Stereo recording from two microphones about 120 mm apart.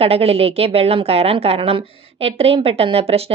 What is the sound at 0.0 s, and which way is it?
A woman's voice, 55° right (ahead or behind).